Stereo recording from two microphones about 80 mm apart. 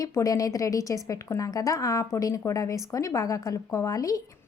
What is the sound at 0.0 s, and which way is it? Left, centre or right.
A woman's voice, left.